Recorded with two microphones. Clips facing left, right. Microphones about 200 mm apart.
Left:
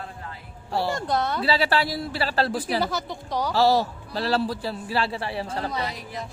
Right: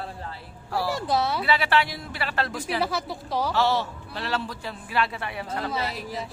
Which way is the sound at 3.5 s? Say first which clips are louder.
Left 7 dB; 35° left (ahead or behind).